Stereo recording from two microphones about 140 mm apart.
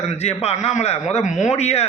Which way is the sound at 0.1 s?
50° left (ahead or behind).